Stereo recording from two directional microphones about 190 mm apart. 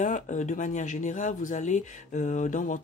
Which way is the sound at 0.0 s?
40° left (ahead or behind).